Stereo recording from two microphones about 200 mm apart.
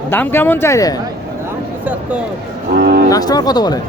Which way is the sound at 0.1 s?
10° left (ahead or behind).